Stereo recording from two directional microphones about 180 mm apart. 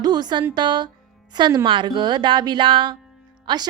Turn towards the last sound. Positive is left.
turn(degrees=-25)  # may be behind; listen again after turning